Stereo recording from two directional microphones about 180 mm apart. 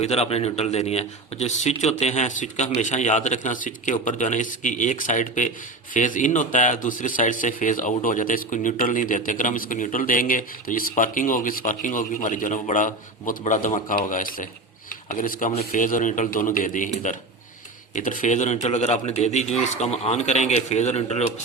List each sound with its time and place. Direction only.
0.0 s a man's voice: 35° left (ahead or behind)